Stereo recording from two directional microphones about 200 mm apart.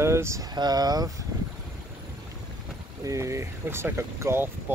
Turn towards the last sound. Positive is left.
turn(degrees=-10)  # may be behind; listen again after turning